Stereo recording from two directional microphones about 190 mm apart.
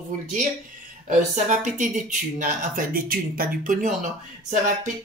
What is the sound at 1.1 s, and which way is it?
Speech, 40° right (ahead or behind).